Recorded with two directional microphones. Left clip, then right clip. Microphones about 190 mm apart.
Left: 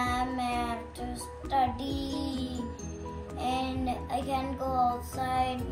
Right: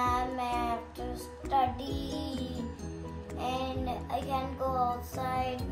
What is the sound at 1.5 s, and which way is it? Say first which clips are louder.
Speech: left 1 dB; 30° right (ahead or behind).